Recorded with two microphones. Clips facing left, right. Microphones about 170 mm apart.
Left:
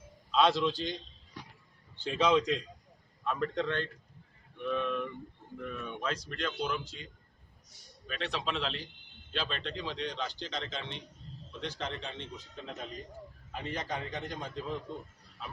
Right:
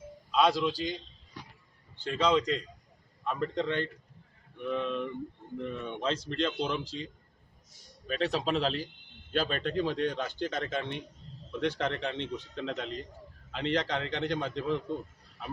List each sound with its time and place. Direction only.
0.3 s a sound: 5° right (ahead or behind)
0.6 s a man's voice: 5° right (ahead or behind)
2.0 s a man's voice: 10° left (ahead or behind)
3.2 s a man's voice: 15° right (ahead or behind); by 14.8 s 70° right (ahead or behind)